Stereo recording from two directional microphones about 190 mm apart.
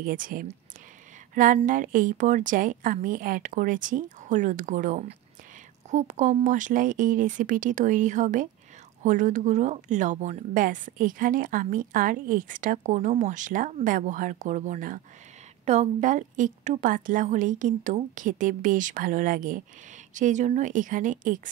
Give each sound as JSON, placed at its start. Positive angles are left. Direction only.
{"t": 0.0, "sound": "a woman's voice", "side_deg": -45}